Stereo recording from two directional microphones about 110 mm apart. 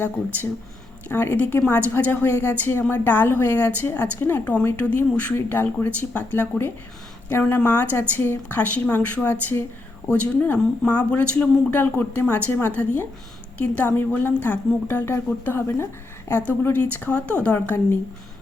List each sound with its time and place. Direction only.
1.0 s a woman's voice: 20° left (ahead or behind)